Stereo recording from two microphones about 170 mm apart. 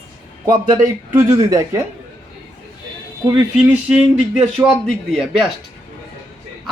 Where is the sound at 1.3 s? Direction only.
20° right (ahead or behind).